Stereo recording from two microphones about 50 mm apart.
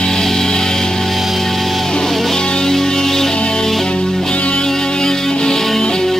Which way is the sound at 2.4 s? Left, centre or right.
Centre.